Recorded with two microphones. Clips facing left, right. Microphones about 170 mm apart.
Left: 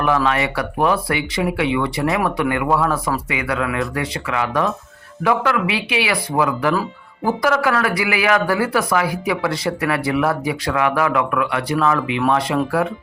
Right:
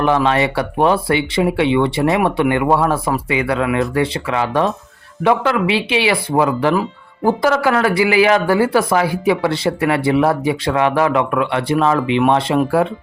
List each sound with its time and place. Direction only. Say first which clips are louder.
0.0 s speech: right 3 dB; 25° right (ahead or behind)